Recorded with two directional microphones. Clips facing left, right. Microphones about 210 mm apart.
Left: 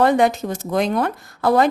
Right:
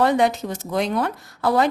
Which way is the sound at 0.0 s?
50° left (ahead or behind).